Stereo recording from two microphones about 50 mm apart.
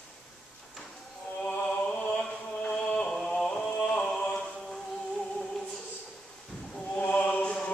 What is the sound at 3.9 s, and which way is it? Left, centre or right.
Music, left.